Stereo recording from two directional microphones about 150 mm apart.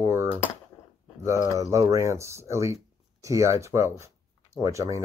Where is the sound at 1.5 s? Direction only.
20° right (ahead or behind).